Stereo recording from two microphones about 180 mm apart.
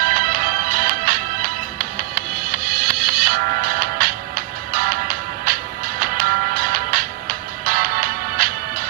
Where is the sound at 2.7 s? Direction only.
55° right (ahead or behind).